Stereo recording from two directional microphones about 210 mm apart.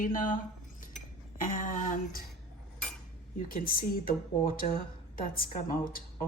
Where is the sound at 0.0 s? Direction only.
40° left (ahead or behind).